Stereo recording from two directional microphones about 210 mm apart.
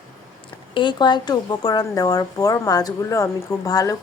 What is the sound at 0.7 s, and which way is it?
A woman's voice, 20° left (ahead or behind).